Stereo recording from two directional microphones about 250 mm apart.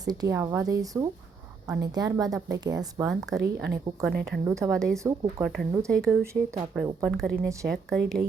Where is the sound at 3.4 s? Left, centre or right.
Right.